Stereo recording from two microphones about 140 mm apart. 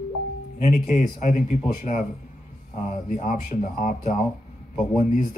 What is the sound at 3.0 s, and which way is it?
Speech, 65° left (ahead or behind).